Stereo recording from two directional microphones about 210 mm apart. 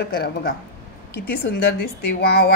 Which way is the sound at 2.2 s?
50° left (ahead or behind).